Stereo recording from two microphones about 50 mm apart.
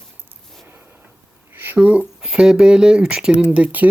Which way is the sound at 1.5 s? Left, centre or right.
Right.